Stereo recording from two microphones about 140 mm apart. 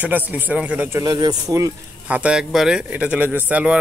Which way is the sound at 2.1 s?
10° right (ahead or behind).